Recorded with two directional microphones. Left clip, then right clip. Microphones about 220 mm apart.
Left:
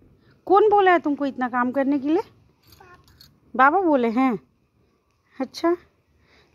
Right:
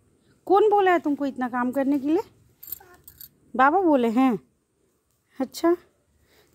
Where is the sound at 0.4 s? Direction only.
10° right (ahead or behind).